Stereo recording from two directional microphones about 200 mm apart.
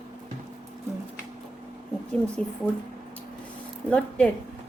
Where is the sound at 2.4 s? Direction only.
5° left (ahead or behind).